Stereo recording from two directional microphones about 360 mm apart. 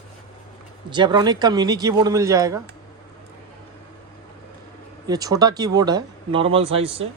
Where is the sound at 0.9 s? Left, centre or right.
Centre.